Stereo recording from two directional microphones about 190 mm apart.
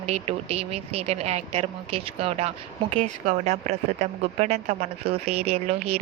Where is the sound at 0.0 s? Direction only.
35° right (ahead or behind).